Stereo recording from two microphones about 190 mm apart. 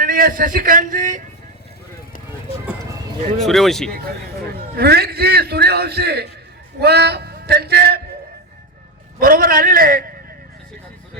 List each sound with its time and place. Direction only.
0.0 s a man's voice: 50° right (ahead or behind)
3.4 s speech: centre (ahead or behind)
4.7 s a man's voice: 55° right (ahead or behind)
9.1 s a man's voice: 50° right (ahead or behind)